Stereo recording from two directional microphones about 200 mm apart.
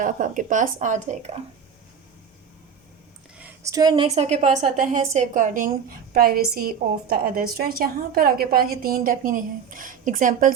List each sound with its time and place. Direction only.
0.0 s a woman's voice: 40° right (ahead or behind)
3.3 s a sound: 10° right (ahead or behind)
3.8 s a woman's voice: 25° right (ahead or behind); by 10.5 s 40° right (ahead or behind)